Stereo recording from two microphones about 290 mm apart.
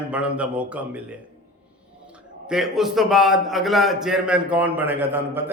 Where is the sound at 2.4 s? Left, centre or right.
Centre.